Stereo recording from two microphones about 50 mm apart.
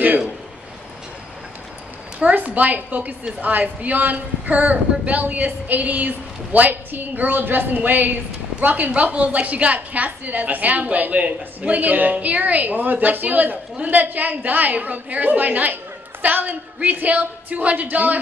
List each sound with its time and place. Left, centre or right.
2.1 s speech: right